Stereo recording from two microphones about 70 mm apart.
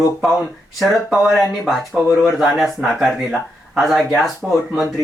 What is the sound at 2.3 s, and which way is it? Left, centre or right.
Speech, centre.